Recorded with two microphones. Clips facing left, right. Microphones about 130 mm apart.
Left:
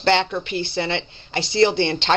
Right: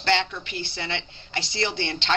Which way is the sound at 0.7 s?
30° left (ahead or behind).